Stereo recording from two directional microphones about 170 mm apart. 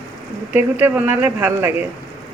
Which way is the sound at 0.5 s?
10° right (ahead or behind).